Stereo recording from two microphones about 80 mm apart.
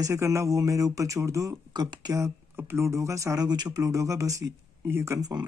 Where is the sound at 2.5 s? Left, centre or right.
Right.